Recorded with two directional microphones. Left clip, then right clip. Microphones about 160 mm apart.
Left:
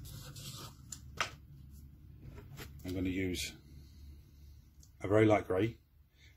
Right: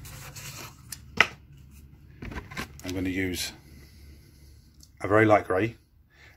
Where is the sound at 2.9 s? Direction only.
25° left (ahead or behind).